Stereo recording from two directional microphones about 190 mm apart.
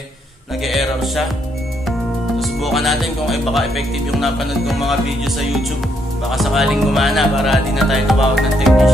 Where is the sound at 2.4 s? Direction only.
Centre (ahead or behind).